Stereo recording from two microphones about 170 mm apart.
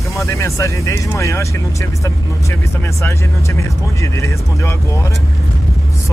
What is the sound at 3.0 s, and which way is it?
Speech, 15° left (ahead or behind).